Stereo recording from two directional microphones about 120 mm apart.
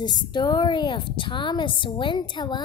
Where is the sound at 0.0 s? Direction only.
40° left (ahead or behind).